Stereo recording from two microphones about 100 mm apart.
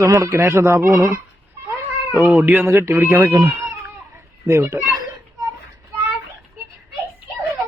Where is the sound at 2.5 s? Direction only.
20° right (ahead or behind).